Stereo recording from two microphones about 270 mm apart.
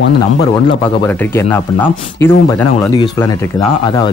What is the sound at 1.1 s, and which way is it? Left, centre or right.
Speech, centre.